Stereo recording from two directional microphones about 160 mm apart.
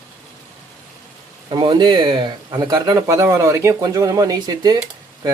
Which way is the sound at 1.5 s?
25° right (ahead or behind).